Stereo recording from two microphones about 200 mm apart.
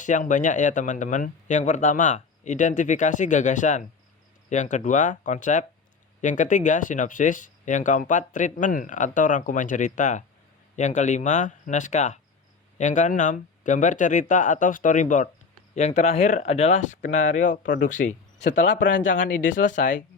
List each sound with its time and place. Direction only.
0.0 s speech: 40° left (ahead or behind)
18.8 s speech: 60° left (ahead or behind)
19.0 s speech: 40° left (ahead or behind)